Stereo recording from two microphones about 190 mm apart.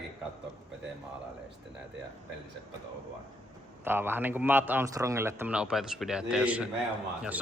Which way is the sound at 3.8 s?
10° right (ahead or behind).